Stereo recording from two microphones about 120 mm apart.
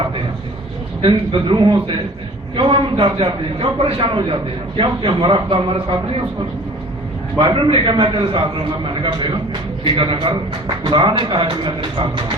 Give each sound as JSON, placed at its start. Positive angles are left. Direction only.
{"t": 1.0, "sound": "a man's voice", "side_deg": -45}
{"t": 7.3, "sound": "a man's voice", "side_deg": -45}